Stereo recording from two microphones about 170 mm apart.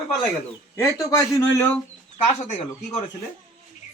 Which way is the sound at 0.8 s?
15° left (ahead or behind).